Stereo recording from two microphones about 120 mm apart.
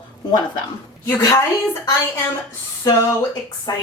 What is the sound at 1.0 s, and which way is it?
Speech, 25° left (ahead or behind).